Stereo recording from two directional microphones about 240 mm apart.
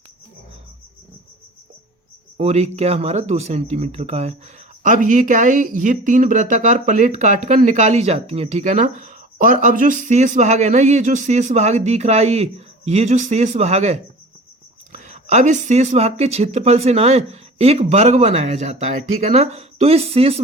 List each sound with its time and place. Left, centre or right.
2.4 s speech: right